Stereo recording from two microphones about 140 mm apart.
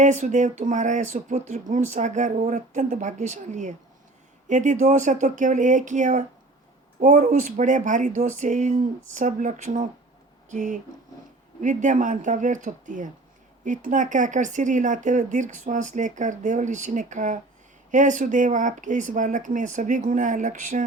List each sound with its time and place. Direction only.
0.0 s speech: 60° right (ahead or behind)